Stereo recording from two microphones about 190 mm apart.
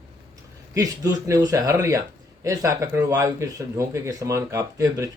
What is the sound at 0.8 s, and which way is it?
Speech, 20° right (ahead or behind).